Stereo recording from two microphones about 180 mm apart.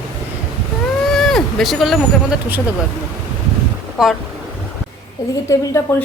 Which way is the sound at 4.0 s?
5° right (ahead or behind).